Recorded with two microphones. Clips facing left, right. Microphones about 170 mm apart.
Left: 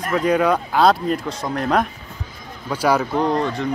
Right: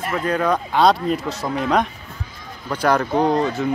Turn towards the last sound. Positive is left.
turn(degrees=-5)  # may be behind; listen again after turning